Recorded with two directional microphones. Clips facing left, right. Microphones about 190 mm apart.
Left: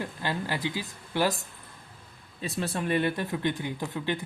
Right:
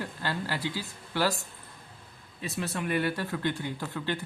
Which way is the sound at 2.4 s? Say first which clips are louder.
Left 2 dB; 30° left (ahead or behind).